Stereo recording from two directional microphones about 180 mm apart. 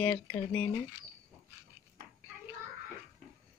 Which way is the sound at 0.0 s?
10° left (ahead or behind).